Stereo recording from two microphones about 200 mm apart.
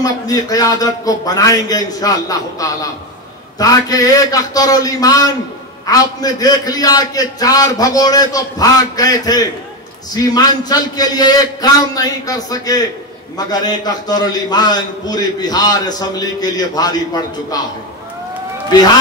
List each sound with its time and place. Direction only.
0.0 s a man's voice: 20° left (ahead or behind)